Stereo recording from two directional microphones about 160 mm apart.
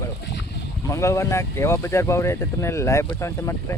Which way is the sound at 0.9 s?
20° left (ahead or behind).